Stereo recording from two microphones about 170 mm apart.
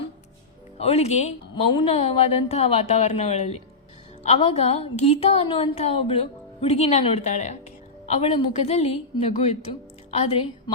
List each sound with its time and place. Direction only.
0.8 s a woman's voice: 40° left (ahead or behind)